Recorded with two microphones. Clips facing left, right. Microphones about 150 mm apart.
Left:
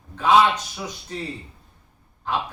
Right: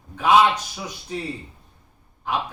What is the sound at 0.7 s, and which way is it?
Speech, 10° right (ahead or behind).